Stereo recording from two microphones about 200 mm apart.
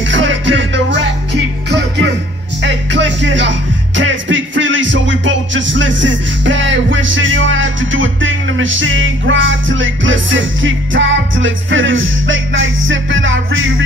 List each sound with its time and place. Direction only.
0.0 s music: 65° right (ahead or behind)